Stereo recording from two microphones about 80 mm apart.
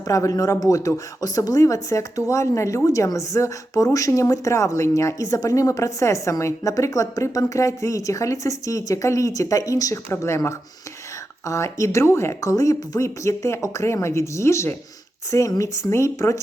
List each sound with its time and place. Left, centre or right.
0.0 s a woman's voice: left